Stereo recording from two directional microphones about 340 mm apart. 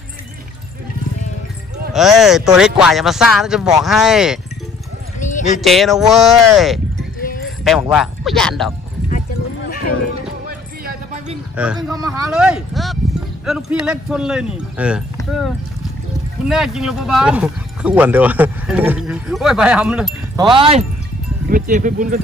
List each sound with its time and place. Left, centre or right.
2.0 s speech: centre
5.2 s horse: left
5.6 s speech: centre
10.4 s a sound: right
11.5 s speech: centre
15.1 s a sound: centre
16.4 s speech: centre
20.4 s speech: centre